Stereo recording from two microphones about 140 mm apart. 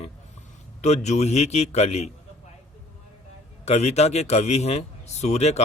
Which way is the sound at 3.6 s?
50° left (ahead or behind).